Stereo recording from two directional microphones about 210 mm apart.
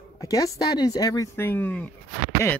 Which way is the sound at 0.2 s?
15° left (ahead or behind).